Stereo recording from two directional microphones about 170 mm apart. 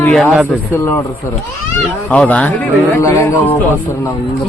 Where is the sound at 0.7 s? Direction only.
15° left (ahead or behind).